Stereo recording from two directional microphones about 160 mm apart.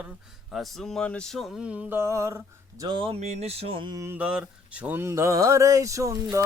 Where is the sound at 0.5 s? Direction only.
Centre (ahead or behind); by 3.9 s 35° right (ahead or behind).